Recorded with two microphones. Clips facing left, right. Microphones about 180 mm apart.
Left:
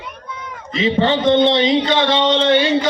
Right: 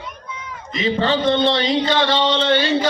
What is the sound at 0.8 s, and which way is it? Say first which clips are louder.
Speech: left 3 dB; 20° left (ahead or behind).